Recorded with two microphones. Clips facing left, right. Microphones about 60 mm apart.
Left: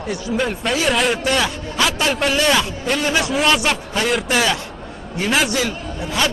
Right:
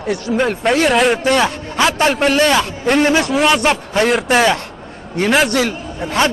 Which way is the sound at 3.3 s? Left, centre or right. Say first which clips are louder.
Right 4 dB; centre.